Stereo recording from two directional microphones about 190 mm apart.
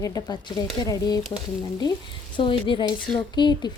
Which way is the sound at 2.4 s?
25° left (ahead or behind).